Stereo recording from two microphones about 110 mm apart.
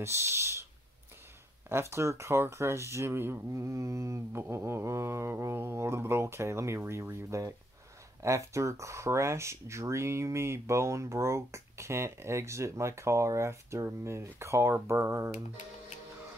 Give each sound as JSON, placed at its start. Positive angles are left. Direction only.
{"t": 0.0, "sound": "speech", "side_deg": -25}
{"t": 1.7, "sound": "speech", "side_deg": -25}